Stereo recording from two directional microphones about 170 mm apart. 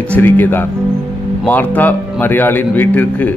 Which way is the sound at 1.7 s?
10° left (ahead or behind).